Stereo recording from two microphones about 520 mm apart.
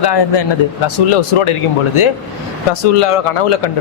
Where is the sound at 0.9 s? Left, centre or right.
Left.